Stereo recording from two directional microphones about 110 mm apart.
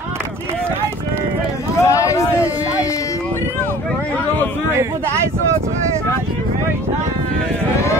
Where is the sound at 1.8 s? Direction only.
30° left (ahead or behind).